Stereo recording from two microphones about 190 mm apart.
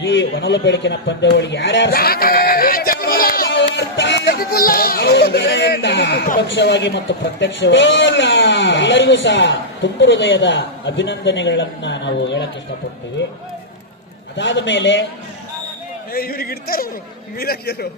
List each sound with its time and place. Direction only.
0.0 s a man's voice: 75° left (ahead or behind)
14.3 s a man's voice: 70° left (ahead or behind)
16.1 s speech: 50° left (ahead or behind)